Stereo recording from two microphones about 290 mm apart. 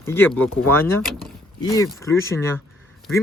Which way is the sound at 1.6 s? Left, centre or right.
Centre.